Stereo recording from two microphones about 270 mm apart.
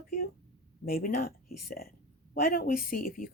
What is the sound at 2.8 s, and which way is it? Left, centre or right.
Speech, left.